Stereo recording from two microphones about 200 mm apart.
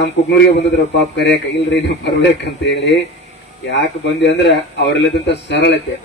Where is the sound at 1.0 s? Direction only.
60° left (ahead or behind).